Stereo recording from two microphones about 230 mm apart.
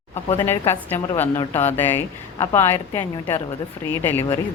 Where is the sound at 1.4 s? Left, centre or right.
Left.